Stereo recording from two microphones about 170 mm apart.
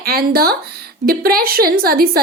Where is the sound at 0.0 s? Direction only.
65° right (ahead or behind).